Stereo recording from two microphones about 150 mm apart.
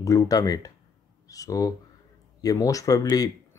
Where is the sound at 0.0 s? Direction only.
20° left (ahead or behind).